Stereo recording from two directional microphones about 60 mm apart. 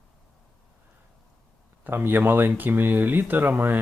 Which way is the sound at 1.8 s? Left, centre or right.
Right.